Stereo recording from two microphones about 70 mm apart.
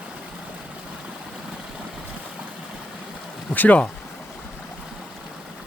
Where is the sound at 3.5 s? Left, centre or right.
Left.